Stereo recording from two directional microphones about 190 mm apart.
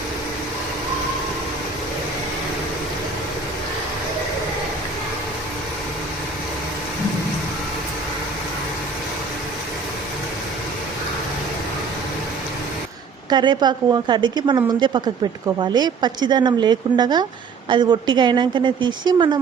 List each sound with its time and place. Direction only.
13.3 s speech: 25° right (ahead or behind)